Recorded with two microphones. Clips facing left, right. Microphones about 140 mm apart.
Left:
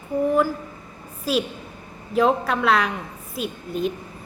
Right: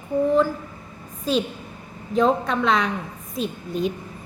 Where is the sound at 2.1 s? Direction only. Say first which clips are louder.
Even; 5° left (ahead or behind).